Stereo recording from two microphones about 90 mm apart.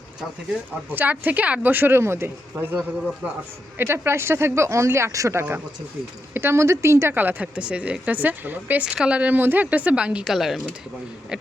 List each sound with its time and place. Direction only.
0.9 s a woman's voice: 20° right (ahead or behind); by 10.6 s centre (ahead or behind)